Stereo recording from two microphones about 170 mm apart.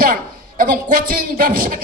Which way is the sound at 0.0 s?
55° right (ahead or behind).